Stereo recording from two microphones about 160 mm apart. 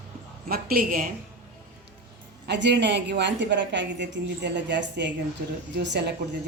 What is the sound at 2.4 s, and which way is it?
A woman's voice, 90° right.